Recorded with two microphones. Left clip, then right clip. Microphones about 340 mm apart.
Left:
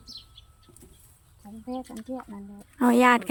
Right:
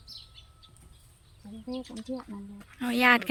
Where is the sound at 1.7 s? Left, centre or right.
Centre.